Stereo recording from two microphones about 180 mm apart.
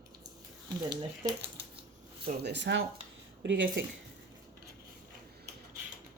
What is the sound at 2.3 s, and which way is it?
Speech, 65° right (ahead or behind).